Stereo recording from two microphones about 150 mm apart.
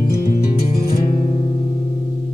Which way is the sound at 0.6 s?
45° left (ahead or behind).